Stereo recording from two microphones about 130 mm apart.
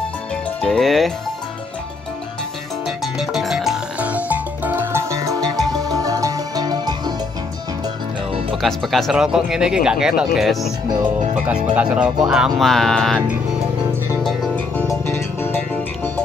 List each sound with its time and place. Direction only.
0.6 s speech: centre (ahead or behind)
3.2 s music: 5° right (ahead or behind); by 7.2 s 30° right (ahead or behind)
8.6 s speech: centre (ahead or behind)
11.7 s speech: 10° right (ahead or behind)
14.9 s music: 20° left (ahead or behind)